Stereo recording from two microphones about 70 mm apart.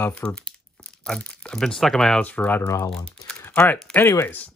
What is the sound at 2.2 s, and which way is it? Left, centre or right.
Speech, left.